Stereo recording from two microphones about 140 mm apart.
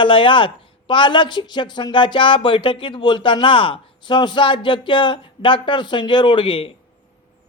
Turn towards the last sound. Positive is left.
turn(degrees=40)  # may be behind; listen again after turning